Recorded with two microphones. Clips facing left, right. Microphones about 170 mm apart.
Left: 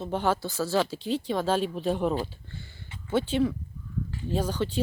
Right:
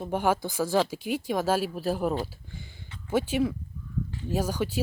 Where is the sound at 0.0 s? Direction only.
10° right (ahead or behind).